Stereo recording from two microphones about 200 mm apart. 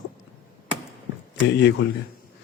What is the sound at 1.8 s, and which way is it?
Speech, 55° left (ahead or behind).